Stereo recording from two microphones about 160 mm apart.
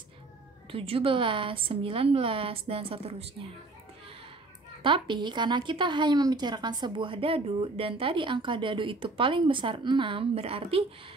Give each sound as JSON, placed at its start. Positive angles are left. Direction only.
{"t": 0.7, "sound": "a woman's voice", "side_deg": -35}
{"t": 4.8, "sound": "a woman's voice", "side_deg": -30}